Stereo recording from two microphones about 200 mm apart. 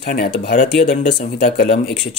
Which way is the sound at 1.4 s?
60° left (ahead or behind).